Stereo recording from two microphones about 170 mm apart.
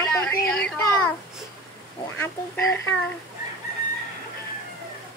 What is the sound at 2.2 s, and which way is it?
Speech, 15° left (ahead or behind).